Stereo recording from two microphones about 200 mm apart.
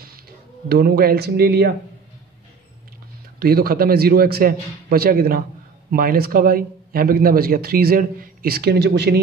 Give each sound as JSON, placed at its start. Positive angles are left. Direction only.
{"t": 0.7, "sound": "a man's voice", "side_deg": -50}
{"t": 3.3, "sound": "a man's voice", "side_deg": -50}